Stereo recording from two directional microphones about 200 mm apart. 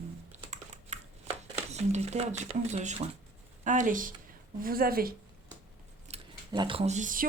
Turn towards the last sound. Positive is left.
turn(degrees=-40)  # may be behind; listen again after turning